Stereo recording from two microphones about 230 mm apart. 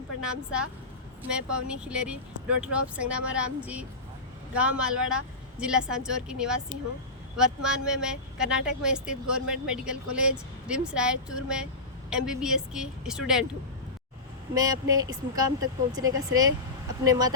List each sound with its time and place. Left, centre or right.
0.2 s speech: centre
14.5 s speech: centre